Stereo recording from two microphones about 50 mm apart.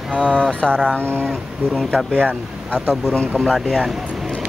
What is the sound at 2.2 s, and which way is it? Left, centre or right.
Speech, right.